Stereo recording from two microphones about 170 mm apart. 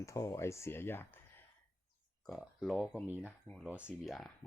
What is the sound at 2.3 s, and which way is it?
Speech, centre (ahead or behind).